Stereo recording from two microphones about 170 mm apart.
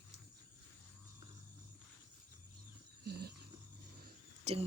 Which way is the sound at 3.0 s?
70° right (ahead or behind).